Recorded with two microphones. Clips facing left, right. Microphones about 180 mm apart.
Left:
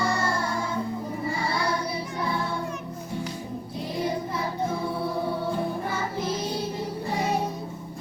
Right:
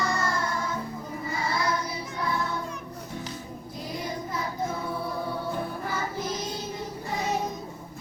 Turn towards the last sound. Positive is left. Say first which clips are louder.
# left 4 dB
turn(degrees=30)  # may be behind; listen again after turning